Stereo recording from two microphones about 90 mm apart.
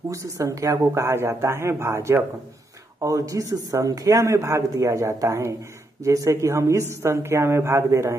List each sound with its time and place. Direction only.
0.1 s a man's voice: 35° right (ahead or behind)